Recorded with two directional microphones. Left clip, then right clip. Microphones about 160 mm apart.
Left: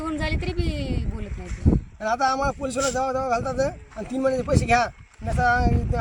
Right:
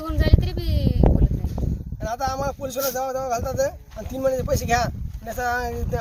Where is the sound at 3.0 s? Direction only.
15° right (ahead or behind).